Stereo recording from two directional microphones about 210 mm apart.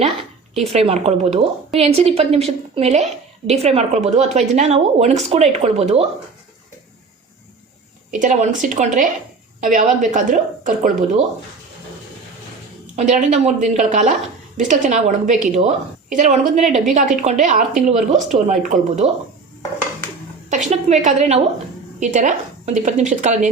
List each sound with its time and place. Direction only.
0.0 s a woman's voice: 30° right (ahead or behind)
8.1 s a woman's voice: 40° right (ahead or behind)
13.0 s a woman's voice: 35° right (ahead or behind)
20.7 s a woman's voice: 35° right (ahead or behind)